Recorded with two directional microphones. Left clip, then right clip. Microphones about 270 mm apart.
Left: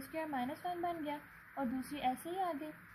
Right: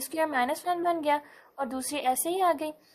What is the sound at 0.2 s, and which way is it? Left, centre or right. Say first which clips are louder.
A woman's voice: right 13 dB; centre.